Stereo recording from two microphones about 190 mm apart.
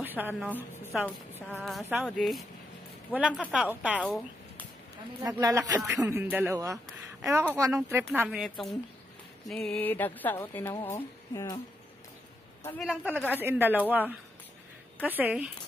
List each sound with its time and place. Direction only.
0.0 s a woman's voice: 10° right (ahead or behind)
1.0 s a woman's voice: 5° left (ahead or behind)
5.2 s speech: 15° right (ahead or behind)
8.4 s speech: centre (ahead or behind); by 11.6 s 15° left (ahead or behind)
12.8 s speech: 5° right (ahead or behind)
15.0 s speech: 10° right (ahead or behind)